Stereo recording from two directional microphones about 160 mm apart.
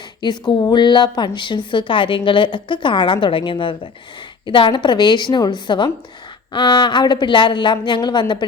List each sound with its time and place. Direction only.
0.2 s a woman's voice: 25° left (ahead or behind)